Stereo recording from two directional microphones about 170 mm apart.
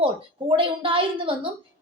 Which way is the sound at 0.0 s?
30° right (ahead or behind).